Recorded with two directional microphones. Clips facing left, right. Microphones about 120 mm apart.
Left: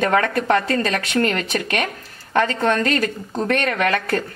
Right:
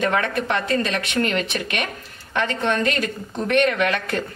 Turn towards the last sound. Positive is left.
turn(degrees=45)  # may be behind; listen again after turning